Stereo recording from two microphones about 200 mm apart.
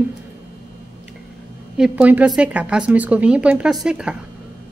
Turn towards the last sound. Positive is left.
turn(degrees=-5)  # may be behind; listen again after turning